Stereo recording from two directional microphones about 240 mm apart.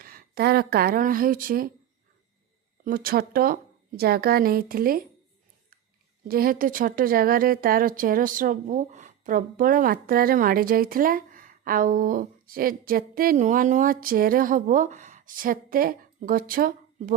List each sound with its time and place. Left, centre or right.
0.0 s speech: right
2.8 s a woman's voice: right
6.2 s a woman's voice: right